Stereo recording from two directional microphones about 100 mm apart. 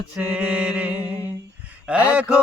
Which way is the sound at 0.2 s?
15° right (ahead or behind).